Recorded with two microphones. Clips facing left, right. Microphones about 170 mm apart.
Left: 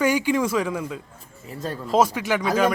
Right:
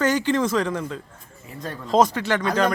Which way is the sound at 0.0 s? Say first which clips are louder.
Even; 10° left (ahead or behind).